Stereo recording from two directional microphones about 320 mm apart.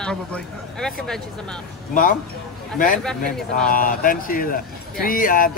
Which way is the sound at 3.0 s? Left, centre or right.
Centre.